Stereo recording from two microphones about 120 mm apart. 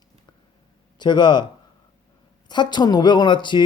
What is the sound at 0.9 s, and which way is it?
Speech, 40° left (ahead or behind).